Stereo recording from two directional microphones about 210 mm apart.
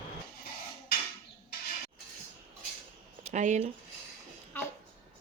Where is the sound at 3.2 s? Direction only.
35° right (ahead or behind).